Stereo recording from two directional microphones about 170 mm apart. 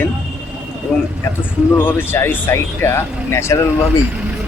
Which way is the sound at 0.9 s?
5° left (ahead or behind).